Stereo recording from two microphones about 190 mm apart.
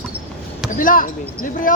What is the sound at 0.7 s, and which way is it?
Speech, 45° left (ahead or behind).